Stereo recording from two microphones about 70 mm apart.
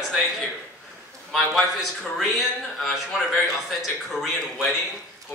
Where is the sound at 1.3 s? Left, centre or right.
Centre.